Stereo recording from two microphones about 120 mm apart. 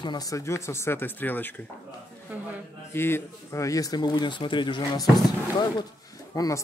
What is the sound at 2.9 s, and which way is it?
Speech, 20° left (ahead or behind).